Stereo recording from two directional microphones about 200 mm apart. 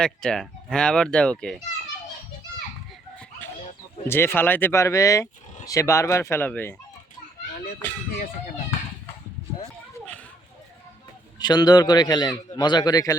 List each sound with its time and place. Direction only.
0.0 s speech: 5° left (ahead or behind)
4.0 s speech: 10° left (ahead or behind)
7.8 s speech: 10° left (ahead or behind)
11.3 s a man's voice: 20° left (ahead or behind)